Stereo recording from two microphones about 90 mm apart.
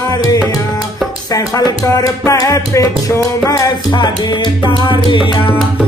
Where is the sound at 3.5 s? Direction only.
50° left (ahead or behind); by 5.3 s 65° left (ahead or behind).